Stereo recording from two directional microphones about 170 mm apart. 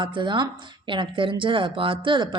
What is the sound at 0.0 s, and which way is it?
A woman's voice, 30° right (ahead or behind).